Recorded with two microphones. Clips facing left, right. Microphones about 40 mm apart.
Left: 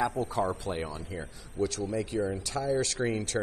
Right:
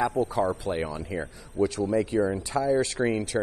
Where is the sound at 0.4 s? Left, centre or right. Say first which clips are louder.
Right 4 dB; right.